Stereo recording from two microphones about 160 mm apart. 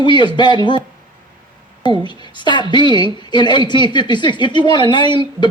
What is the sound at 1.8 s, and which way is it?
A woman's voice, 30° left (ahead or behind).